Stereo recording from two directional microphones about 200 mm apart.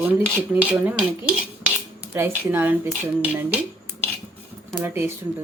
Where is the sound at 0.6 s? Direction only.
5° right (ahead or behind).